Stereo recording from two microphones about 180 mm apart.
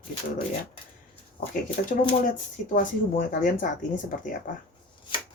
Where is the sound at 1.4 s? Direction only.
55° left (ahead or behind).